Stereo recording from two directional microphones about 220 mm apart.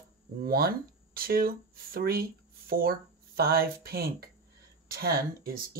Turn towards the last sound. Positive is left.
turn(degrees=-45)  # may be behind; listen again after turning